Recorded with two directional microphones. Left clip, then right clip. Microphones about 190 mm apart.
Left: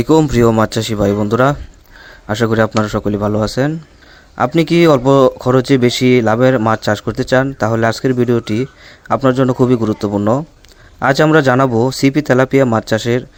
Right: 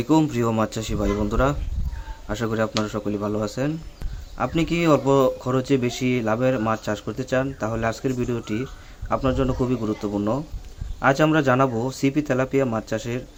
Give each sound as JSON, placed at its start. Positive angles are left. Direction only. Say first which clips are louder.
{"t": 0.0, "sound": "speech", "louder": "left 10 dB", "side_deg": 50}